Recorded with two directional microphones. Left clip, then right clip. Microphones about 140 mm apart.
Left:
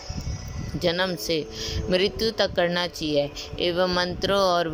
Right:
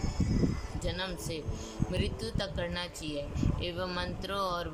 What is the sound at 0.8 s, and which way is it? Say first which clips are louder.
Speech: left 13 dB; 55° left (ahead or behind).